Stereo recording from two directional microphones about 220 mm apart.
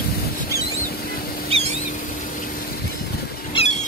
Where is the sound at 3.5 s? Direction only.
25° left (ahead or behind).